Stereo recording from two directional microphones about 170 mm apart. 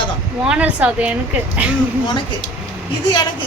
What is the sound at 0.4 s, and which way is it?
Speech, 5° right (ahead or behind).